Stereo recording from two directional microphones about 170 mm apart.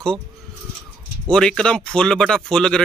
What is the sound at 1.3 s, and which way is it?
Speech, 5° left (ahead or behind).